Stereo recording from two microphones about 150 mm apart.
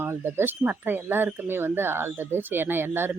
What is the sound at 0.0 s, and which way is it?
Speech, 15° right (ahead or behind).